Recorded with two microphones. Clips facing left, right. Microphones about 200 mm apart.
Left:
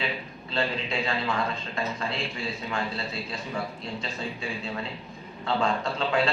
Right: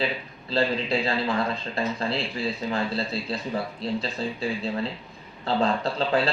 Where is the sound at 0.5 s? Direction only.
35° right (ahead or behind).